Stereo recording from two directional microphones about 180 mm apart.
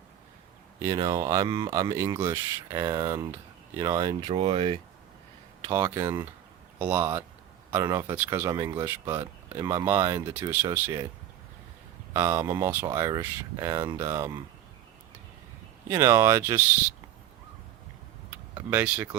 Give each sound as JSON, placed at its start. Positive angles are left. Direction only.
{"t": 0.8, "sound": "speech", "side_deg": -20}
{"t": 5.6, "sound": "speech", "side_deg": -15}
{"t": 9.0, "sound": "speech", "side_deg": -25}
{"t": 12.1, "sound": "speech", "side_deg": -15}
{"t": 15.9, "sound": "speech", "side_deg": -15}
{"t": 18.5, "sound": "speech", "side_deg": -10}